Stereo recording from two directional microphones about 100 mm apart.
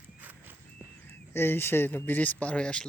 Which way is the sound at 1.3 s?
25° left (ahead or behind).